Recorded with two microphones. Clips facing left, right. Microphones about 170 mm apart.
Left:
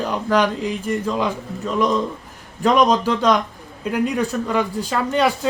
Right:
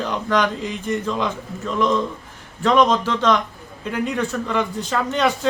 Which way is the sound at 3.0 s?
10° left (ahead or behind).